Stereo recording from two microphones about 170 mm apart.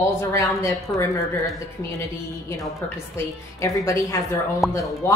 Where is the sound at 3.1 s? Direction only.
20° left (ahead or behind).